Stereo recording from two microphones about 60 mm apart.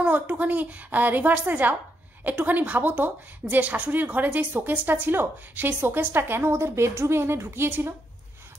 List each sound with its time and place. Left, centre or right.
0.0 s a woman's voice: right